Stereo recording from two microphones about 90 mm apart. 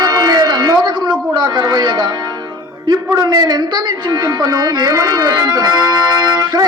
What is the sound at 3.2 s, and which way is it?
Speech, 50° right (ahead or behind).